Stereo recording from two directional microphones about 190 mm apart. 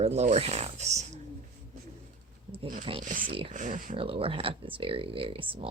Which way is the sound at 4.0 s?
30° right (ahead or behind).